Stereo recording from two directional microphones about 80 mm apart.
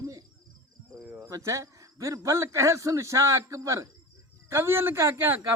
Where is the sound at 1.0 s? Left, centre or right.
Right.